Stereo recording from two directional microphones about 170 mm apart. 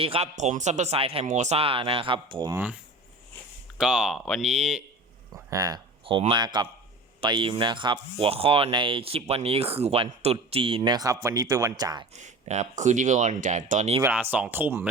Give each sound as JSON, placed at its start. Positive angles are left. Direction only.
{"t": 0.0, "sound": "speech", "side_deg": -35}
{"t": 2.5, "sound": "speech", "side_deg": -10}
{"t": 3.8, "sound": "speech", "side_deg": -5}
{"t": 5.3, "sound": "speech", "side_deg": -20}
{"t": 12.1, "sound": "speech", "side_deg": -45}
{"t": 14.0, "sound": "speech", "side_deg": -10}